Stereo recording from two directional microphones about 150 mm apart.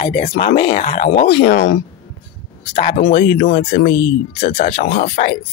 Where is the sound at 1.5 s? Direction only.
90° left.